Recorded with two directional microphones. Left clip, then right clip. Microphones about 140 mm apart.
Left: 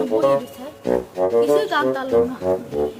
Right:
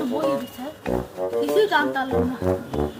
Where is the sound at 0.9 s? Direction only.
Centre (ahead or behind).